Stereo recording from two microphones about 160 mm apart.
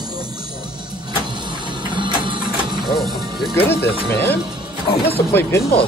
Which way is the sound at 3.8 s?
90° left.